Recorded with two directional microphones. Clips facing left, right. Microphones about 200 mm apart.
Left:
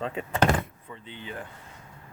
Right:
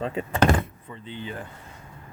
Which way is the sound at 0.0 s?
40° right (ahead or behind).